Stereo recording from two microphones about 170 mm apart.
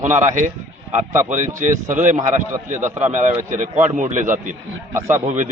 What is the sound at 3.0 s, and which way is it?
Speech, 45° right (ahead or behind).